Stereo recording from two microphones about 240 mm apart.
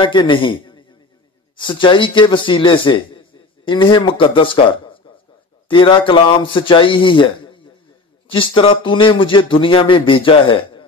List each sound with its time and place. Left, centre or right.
0.0 s a man's voice: centre
5.7 s speech: left